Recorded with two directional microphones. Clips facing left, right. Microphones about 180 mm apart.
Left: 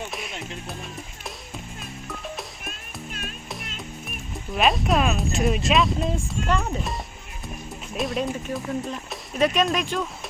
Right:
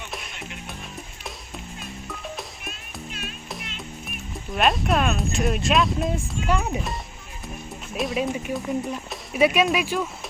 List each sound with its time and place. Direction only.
0.1 s music: centre (ahead or behind)
2.6 s music: 45° left (ahead or behind)
4.5 s speech: centre (ahead or behind)